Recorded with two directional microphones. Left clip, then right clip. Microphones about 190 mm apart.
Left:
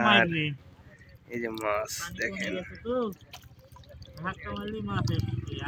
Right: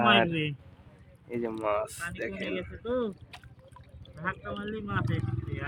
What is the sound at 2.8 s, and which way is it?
Speech, 55° left (ahead or behind).